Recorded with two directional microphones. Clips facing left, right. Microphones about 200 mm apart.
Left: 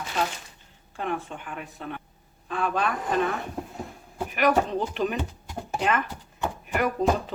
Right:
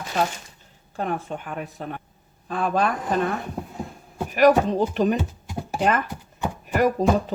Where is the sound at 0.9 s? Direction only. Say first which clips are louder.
Right 3 dB; 40° right (ahead or behind).